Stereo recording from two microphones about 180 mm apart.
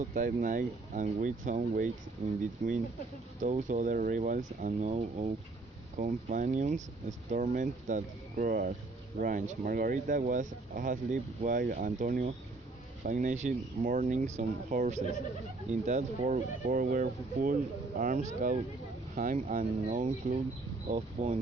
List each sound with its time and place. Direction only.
0.0 s speech: 45° right (ahead or behind)